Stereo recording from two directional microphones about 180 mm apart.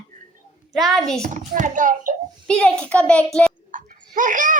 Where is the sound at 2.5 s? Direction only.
5° left (ahead or behind).